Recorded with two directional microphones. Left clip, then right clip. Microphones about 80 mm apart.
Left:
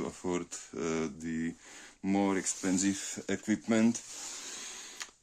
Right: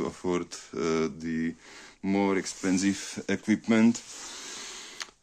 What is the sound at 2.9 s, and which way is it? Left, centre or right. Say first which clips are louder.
Speech: right 4 dB; left.